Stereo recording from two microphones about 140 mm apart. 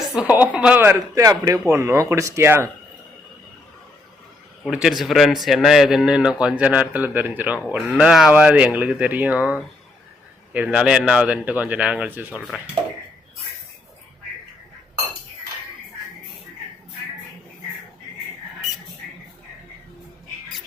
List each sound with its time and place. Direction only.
0.1 s a man's voice: 10° right (ahead or behind)
4.7 s a man's voice: 5° right (ahead or behind)
10.5 s a man's voice: 10° right (ahead or behind)
12.4 s speech: centre (ahead or behind)